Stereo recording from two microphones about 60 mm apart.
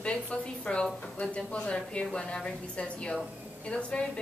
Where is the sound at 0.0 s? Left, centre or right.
Centre.